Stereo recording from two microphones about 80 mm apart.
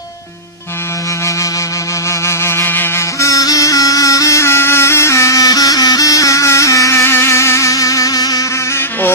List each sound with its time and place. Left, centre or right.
2.2 s music: left
3.2 s music: left